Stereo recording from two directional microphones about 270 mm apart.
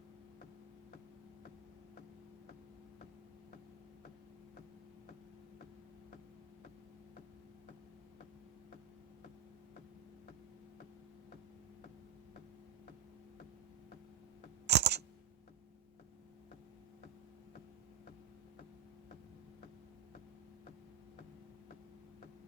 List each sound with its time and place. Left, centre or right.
14.7 s camera: right